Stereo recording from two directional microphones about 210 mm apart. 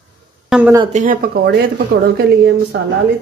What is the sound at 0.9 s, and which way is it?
A woman's voice, 40° right (ahead or behind).